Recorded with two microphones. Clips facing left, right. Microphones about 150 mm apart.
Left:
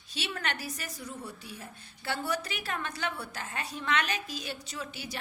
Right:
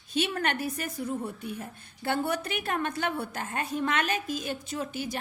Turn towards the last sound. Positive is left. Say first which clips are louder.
# right 7 dB
turn(degrees=-50)  # may be behind; listen again after turning